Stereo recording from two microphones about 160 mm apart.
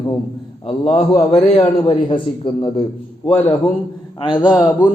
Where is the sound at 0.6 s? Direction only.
40° left (ahead or behind).